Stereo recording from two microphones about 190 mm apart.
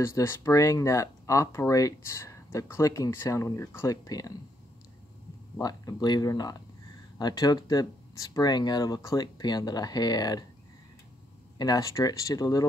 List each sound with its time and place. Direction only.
0.0 s speech: 15° left (ahead or behind)
5.6 s speech: 20° left (ahead or behind)
11.5 s speech: 20° left (ahead or behind)